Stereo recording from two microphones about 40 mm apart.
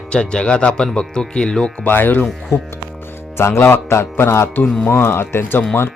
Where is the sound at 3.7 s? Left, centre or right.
Left.